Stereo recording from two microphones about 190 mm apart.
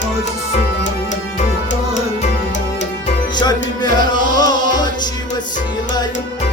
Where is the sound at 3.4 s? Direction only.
20° left (ahead or behind).